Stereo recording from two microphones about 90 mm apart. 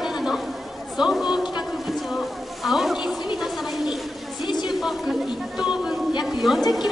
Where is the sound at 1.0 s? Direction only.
5° right (ahead or behind).